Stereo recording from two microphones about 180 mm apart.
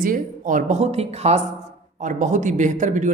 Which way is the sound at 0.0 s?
50° right (ahead or behind).